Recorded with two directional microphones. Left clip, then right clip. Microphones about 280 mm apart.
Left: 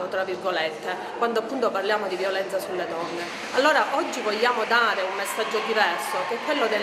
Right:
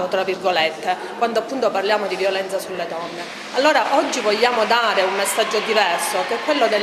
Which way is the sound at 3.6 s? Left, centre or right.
Right.